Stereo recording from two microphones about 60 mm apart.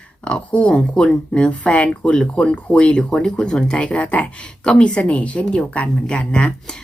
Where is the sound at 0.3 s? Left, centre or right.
Centre.